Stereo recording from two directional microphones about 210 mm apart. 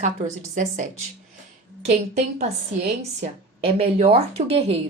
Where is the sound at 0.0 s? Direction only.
35° right (ahead or behind).